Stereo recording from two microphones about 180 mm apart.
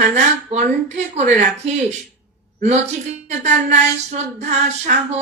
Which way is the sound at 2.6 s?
40° right (ahead or behind).